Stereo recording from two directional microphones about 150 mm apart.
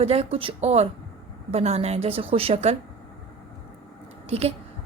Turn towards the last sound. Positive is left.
turn(degrees=-40)  # may be behind; listen again after turning